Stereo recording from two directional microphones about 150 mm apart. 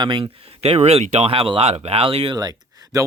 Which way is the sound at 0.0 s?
35° right (ahead or behind).